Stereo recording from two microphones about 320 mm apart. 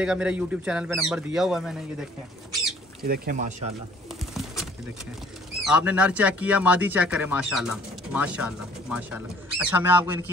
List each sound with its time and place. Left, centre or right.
0.0 s speech: centre
3.0 s speech: right
5.6 s speech: centre